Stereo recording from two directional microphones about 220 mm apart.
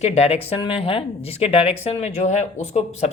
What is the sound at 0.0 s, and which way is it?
Speech, 30° left (ahead or behind).